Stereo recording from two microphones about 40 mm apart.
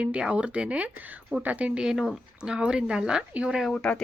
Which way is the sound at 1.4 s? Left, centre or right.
Right.